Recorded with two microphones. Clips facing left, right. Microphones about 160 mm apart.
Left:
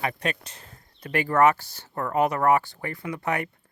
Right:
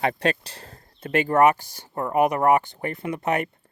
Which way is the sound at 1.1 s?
20° right (ahead or behind).